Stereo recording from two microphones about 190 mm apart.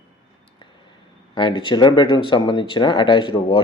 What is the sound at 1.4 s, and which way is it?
Speech, 25° left (ahead or behind).